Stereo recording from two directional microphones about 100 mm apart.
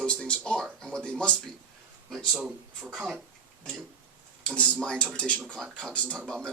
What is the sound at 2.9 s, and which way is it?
Speech, centre (ahead or behind).